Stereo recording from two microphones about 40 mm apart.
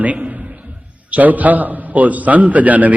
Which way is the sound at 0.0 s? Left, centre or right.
Right.